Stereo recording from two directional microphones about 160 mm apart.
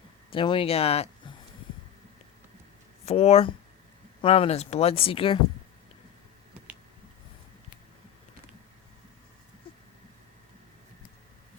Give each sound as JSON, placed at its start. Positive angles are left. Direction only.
{"t": 0.3, "sound": "speech", "side_deg": 35}
{"t": 3.1, "sound": "speech", "side_deg": 40}